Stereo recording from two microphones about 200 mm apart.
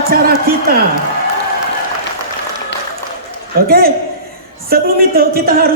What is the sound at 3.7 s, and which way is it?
Speech, 50° right (ahead or behind).